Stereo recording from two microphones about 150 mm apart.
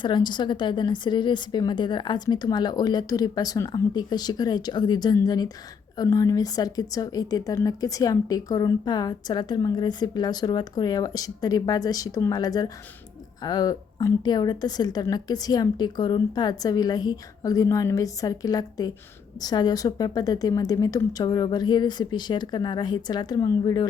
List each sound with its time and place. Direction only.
0.0 s speech: 30° left (ahead or behind)